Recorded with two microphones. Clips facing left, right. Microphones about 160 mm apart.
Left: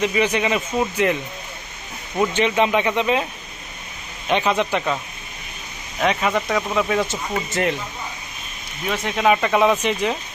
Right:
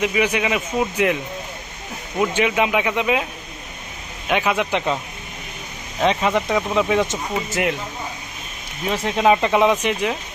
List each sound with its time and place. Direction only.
0.0 s speech: 10° right (ahead or behind)
4.3 s speech: 10° right (ahead or behind)
6.0 s speech: 25° right (ahead or behind)
6.3 s speech: 5° right (ahead or behind)
6.7 s speech: 20° right (ahead or behind)
7.3 s speech: 5° right (ahead or behind)
8.9 s speech: 25° right (ahead or behind); by 10.2 s 10° right (ahead or behind)